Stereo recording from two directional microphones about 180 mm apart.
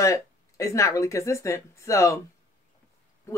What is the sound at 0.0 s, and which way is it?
Speech, 15° left (ahead or behind).